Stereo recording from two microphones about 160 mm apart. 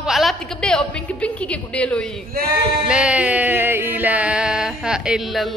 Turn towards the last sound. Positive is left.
turn(degrees=-5)  # may be behind; listen again after turning